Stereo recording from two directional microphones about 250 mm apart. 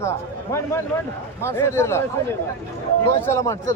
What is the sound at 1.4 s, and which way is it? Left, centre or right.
Speech, centre.